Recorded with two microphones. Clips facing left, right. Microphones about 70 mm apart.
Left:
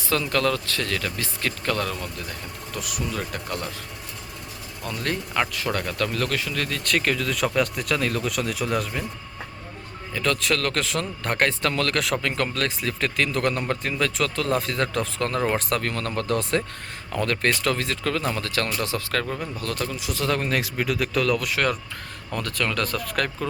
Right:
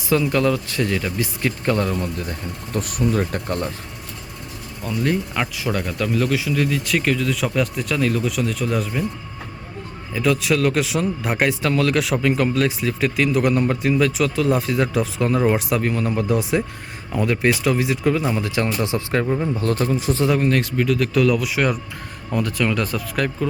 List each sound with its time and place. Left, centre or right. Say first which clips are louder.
0.1 s a man's voice: right 5 dB; centre
2.7 s speech: right 9 dB; right
4.8 s speech: right 7 dB; centre
10.2 s a man's voice: right 5 dB; centre; by 20.2 s right
20.4 s a man's voice: right 6 dB; centre